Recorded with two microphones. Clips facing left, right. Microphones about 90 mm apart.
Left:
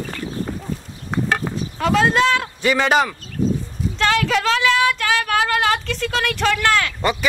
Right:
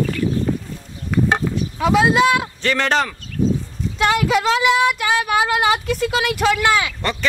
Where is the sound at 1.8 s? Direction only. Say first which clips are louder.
Right 2 dB; 5° right (ahead or behind).